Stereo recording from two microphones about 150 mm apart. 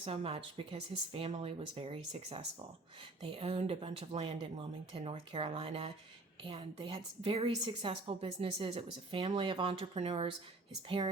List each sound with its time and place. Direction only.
0.0 s speech: 40° right (ahead or behind)